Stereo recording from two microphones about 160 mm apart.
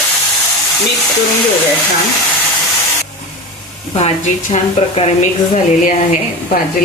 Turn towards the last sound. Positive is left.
turn(degrees=45)  # may be behind; listen again after turning